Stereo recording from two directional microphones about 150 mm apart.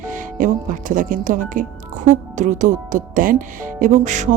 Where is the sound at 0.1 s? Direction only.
65° right (ahead or behind).